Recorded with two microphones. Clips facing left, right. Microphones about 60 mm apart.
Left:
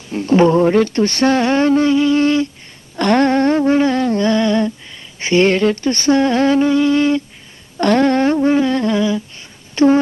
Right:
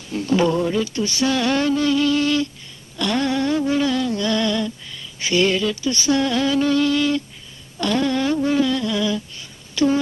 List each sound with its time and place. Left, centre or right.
0.1 s humming: left
0.7 s speech: left
1.4 s humming: left
3.0 s humming: left
6.6 s a sound: left
7.8 s humming: left
9.8 s speech: left